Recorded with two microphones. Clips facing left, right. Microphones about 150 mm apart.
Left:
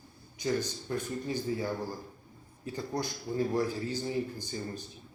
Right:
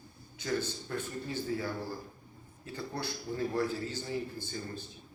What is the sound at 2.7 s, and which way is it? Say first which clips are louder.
Speech: left 3 dB; 15° left (ahead or behind).